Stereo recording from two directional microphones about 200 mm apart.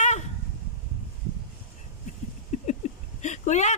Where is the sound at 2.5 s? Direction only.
35° left (ahead or behind).